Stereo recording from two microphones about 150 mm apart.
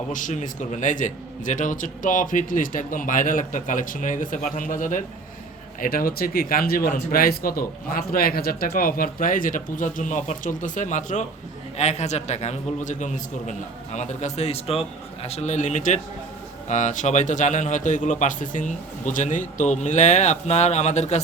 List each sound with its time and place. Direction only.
0.1 s a man's voice: 60° left (ahead or behind)
5.8 s a man's voice: 75° left (ahead or behind); by 21.2 s 50° left (ahead or behind)